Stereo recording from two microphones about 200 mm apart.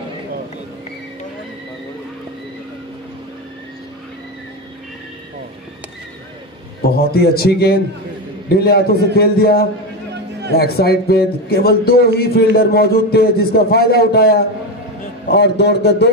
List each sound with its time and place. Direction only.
6.8 s a man's voice: 50° left (ahead or behind)